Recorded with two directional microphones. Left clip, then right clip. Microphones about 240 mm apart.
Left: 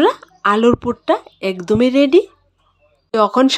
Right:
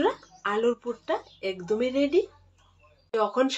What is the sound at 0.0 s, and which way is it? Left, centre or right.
Speech, left.